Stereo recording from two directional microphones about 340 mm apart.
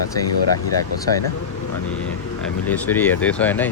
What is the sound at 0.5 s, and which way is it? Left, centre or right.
Speech, left.